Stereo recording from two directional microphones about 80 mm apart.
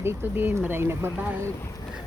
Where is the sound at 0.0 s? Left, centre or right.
Right.